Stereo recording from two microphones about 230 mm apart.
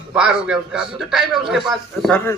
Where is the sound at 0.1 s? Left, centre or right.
Centre.